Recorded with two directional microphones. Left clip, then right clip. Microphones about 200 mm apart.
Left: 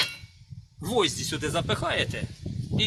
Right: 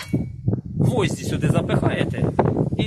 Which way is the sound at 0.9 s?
55° right (ahead or behind).